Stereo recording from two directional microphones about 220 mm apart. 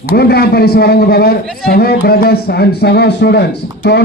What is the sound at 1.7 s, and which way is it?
A man's voice, 45° left (ahead or behind).